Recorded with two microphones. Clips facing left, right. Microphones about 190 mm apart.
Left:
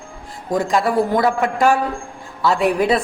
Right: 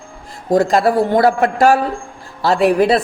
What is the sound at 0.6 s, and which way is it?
Speech, 35° right (ahead or behind).